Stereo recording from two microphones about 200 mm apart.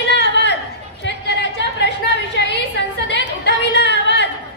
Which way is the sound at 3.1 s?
60° left (ahead or behind).